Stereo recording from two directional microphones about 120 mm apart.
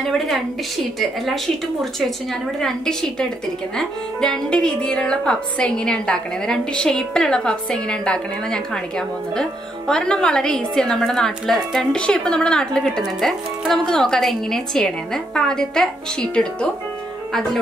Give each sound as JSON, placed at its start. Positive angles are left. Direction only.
{"t": 0.0, "sound": "speech", "side_deg": 0}